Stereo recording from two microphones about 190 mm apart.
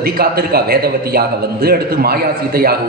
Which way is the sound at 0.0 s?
55° right (ahead or behind).